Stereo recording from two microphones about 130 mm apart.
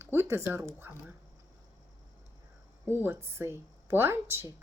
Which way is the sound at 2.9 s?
15° right (ahead or behind).